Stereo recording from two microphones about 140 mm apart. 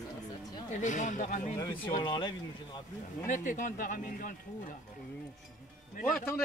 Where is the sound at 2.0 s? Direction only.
35° left (ahead or behind).